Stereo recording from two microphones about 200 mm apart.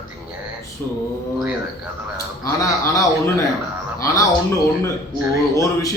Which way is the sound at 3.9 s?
15° left (ahead or behind).